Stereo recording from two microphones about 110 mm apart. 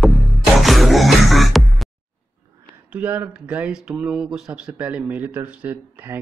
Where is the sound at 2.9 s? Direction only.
15° right (ahead or behind).